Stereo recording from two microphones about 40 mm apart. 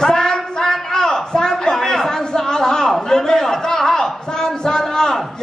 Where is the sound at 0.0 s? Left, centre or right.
Centre.